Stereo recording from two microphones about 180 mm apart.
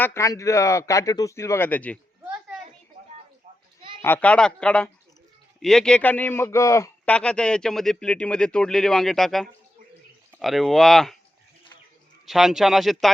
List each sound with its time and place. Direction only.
0.0 s speech: 15° left (ahead or behind)
4.0 s speech: 10° left (ahead or behind)
12.2 s speech: centre (ahead or behind)